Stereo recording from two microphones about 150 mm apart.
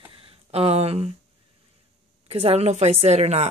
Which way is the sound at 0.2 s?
40° right (ahead or behind).